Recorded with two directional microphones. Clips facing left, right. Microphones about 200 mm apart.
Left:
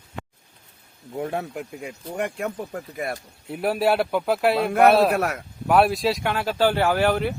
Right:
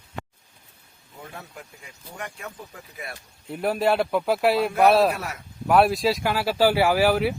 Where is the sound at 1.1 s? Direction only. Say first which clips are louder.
Left 13 dB; 65° left (ahead or behind).